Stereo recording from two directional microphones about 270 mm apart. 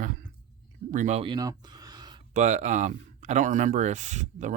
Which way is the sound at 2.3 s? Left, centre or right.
Right.